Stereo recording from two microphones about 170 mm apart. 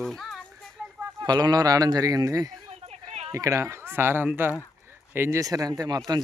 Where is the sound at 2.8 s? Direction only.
35° right (ahead or behind).